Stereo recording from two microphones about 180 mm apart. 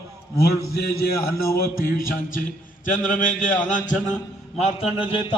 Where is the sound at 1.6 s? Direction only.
55° left (ahead or behind).